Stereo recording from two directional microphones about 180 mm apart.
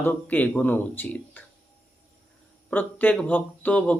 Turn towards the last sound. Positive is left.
turn(degrees=5)  # may be behind; listen again after turning